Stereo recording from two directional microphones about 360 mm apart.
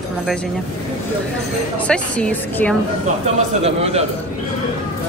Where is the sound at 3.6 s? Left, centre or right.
Centre.